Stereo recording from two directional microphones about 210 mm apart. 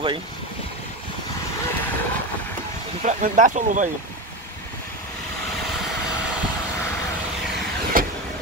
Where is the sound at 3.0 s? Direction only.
35° right (ahead or behind).